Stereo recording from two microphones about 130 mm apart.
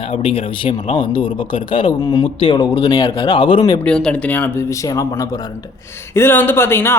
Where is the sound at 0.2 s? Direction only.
45° left (ahead or behind).